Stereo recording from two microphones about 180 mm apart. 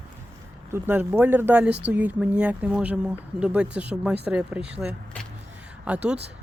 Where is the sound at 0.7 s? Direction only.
10° right (ahead or behind).